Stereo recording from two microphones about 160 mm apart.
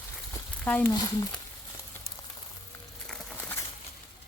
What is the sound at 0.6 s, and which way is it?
Speech, 10° left (ahead or behind).